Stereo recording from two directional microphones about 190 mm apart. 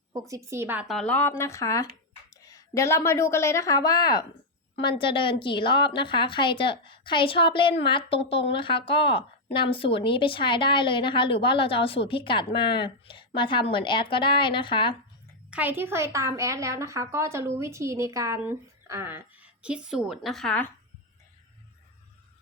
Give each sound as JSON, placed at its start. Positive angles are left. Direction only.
{"t": 0.1, "sound": "a woman's voice", "side_deg": -15}
{"t": 15.4, "sound": "a woman's voice", "side_deg": -10}